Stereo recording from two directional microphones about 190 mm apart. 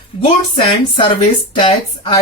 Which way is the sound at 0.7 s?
25° left (ahead or behind).